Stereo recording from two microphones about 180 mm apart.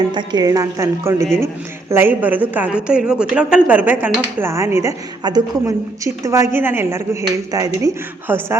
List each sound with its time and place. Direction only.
0.1 s a woman's voice: 25° right (ahead or behind)